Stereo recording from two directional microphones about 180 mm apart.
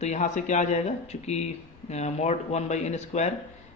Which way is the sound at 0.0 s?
40° left (ahead or behind).